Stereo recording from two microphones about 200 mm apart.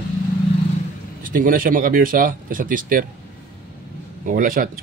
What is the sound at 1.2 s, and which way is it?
Speech, 45° right (ahead or behind).